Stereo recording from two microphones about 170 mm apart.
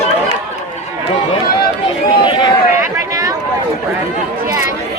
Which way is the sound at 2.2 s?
25° left (ahead or behind).